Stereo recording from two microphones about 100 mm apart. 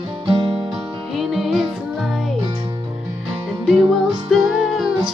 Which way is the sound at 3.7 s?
Centre (ahead or behind).